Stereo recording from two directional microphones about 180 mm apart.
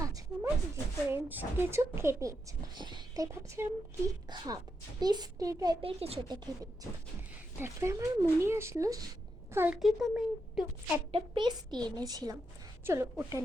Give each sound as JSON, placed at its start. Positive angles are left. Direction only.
{"t": 0.0, "sound": "a sound", "side_deg": -20}
{"t": 1.1, "sound": "a woman's voice", "side_deg": -10}
{"t": 5.8, "sound": "a woman's voice", "side_deg": -35}
{"t": 7.6, "sound": "speech", "side_deg": -15}
{"t": 9.8, "sound": "a woman's voice", "side_deg": 0}
{"t": 11.1, "sound": "a woman's voice", "side_deg": -25}